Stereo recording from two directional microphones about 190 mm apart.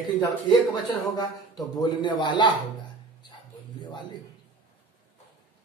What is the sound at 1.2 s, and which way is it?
A man's voice, 20° left (ahead or behind).